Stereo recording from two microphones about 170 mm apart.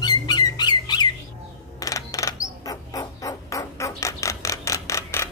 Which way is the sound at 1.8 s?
20° left (ahead or behind).